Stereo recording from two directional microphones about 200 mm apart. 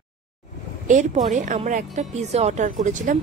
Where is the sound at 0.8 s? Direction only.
35° right (ahead or behind).